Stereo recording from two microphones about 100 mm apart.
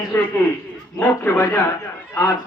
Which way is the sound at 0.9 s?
30° left (ahead or behind).